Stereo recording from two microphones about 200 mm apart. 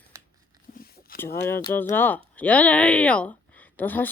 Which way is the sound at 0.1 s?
15° right (ahead or behind).